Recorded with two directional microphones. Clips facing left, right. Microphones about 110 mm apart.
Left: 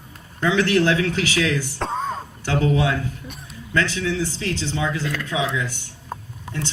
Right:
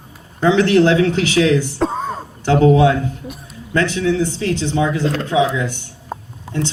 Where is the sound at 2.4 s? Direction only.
25° right (ahead or behind).